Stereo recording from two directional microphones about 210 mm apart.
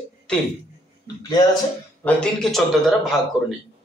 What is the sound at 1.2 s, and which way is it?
Speech, 20° left (ahead or behind).